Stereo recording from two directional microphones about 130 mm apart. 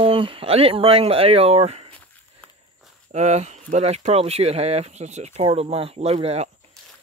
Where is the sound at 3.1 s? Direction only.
65° right (ahead or behind).